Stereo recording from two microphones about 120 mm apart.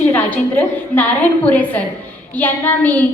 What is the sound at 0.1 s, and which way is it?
A woman's voice, 15° left (ahead or behind).